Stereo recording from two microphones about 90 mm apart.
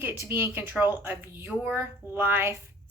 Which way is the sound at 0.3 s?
25° right (ahead or behind).